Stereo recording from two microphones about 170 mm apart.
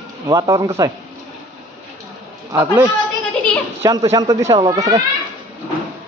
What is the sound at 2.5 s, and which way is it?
A man's voice, 20° right (ahead or behind).